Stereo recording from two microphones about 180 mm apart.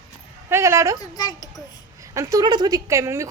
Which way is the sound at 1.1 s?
20° left (ahead or behind).